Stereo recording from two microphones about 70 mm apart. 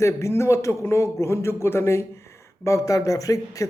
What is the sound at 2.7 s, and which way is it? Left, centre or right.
Speech, left.